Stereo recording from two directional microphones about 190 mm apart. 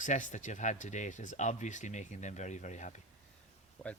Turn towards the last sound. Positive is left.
turn(degrees=0)  # may be behind; listen again after turning